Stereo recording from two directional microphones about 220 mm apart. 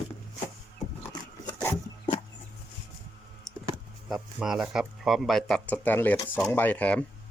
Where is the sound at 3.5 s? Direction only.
Centre (ahead or behind).